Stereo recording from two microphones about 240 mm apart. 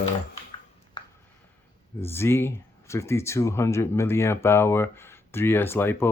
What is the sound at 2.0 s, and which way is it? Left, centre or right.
Speech, centre.